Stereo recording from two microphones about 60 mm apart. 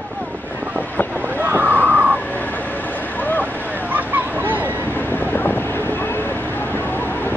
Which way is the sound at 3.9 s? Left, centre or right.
Right.